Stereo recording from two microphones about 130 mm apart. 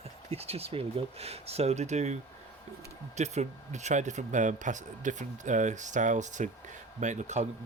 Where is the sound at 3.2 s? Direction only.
60° right (ahead or behind).